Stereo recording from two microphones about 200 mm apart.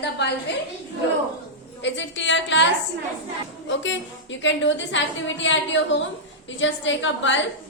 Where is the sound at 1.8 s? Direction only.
65° left (ahead or behind).